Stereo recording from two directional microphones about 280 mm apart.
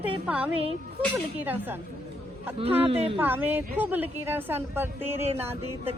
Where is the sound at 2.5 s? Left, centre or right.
Centre.